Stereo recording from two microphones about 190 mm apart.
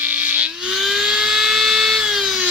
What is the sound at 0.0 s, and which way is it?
Electric toothbrush, 10° right (ahead or behind).